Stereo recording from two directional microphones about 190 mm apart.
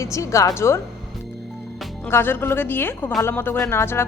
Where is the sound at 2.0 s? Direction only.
10° left (ahead or behind).